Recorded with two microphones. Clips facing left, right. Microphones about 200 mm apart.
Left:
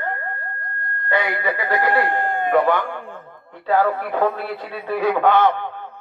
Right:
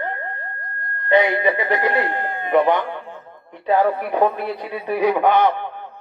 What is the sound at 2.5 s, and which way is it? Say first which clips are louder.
Speech: right 2 dB; 20° right (ahead or behind).